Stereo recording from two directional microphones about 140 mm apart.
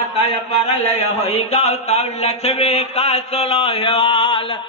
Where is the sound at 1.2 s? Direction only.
50° left (ahead or behind).